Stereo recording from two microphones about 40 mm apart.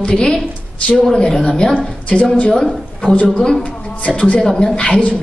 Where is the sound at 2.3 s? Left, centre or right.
Left.